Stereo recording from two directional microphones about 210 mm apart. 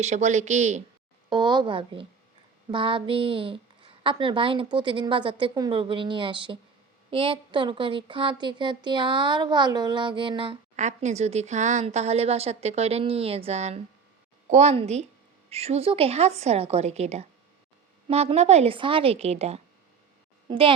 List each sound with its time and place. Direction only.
0.0 s speech: 35° right (ahead or behind)
1.3 s speech: 20° right (ahead or behind)